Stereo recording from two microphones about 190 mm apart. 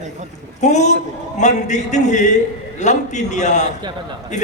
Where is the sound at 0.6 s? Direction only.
40° left (ahead or behind).